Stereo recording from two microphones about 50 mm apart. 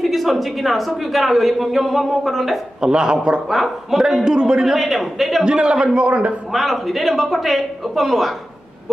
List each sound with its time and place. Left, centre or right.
0.0 s a man's voice: centre
2.8 s speech: centre
3.4 s a man's voice: centre
4.2 s speech: centre
4.7 s a man's voice: centre
5.4 s a man's voice: centre
6.5 s a man's voice: centre